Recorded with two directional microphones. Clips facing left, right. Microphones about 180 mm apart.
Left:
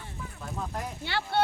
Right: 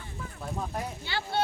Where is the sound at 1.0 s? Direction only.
65° left (ahead or behind).